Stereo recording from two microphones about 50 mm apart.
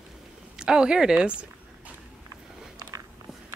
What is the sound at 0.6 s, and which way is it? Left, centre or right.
Speech, centre.